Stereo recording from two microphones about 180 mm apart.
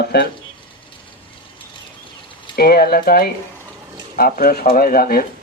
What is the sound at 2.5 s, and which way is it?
Speech, 55° left (ahead or behind).